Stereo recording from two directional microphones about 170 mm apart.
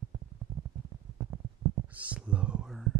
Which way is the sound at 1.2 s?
15° right (ahead or behind).